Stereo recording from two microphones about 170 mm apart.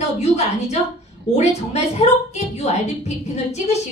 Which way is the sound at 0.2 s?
40° left (ahead or behind).